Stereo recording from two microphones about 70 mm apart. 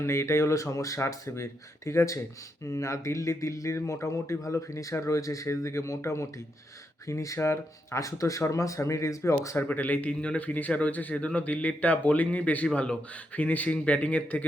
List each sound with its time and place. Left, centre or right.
0.0 s speech: left
7.3 s speech: left
9.6 s speech: left